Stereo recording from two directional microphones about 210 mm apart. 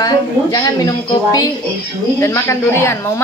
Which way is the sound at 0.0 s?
20° left (ahead or behind).